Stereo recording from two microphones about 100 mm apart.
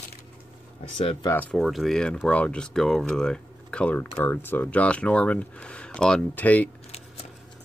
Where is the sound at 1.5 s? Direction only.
Centre (ahead or behind); by 6.7 s 15° left (ahead or behind).